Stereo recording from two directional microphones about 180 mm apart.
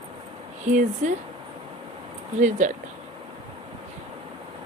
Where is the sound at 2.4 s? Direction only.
40° right (ahead or behind).